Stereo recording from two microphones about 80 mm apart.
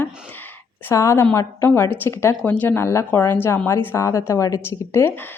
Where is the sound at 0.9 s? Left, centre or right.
Left.